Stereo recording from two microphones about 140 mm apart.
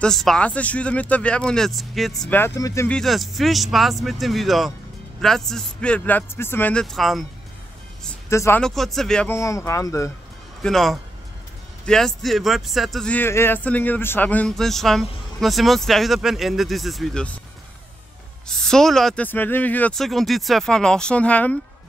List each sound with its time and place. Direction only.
0.0 s speech: 5° left (ahead or behind)
2.3 s speech: 20° left (ahead or behind)
2.9 s speech: centre (ahead or behind)
8.3 s speech: 20° left (ahead or behind)
8.5 s speech: 5° left (ahead or behind)
9.3 s speech: 20° left (ahead or behind)
10.6 s speech: centre (ahead or behind)
18.5 s speech: 5° left (ahead or behind)